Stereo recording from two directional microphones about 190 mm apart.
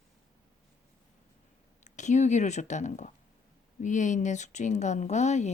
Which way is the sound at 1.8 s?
40° left (ahead or behind).